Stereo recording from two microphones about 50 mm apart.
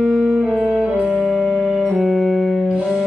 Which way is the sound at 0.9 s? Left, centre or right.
Right.